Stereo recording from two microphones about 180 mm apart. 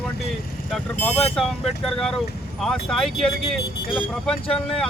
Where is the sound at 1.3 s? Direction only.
Centre (ahead or behind).